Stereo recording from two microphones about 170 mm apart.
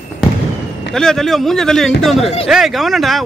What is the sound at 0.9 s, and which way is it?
Speech, 5° left (ahead or behind).